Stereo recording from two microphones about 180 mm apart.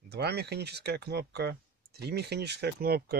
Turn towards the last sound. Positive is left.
turn(degrees=-60)  # may be behind; listen again after turning